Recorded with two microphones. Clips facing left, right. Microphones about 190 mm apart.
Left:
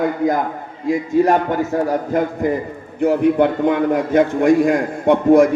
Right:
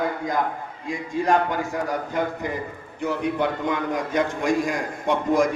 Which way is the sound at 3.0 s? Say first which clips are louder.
Left 10 dB; 55° left (ahead or behind).